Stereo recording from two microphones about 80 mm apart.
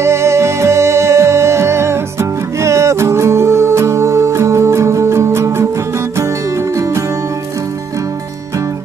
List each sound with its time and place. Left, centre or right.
0.0 s music: right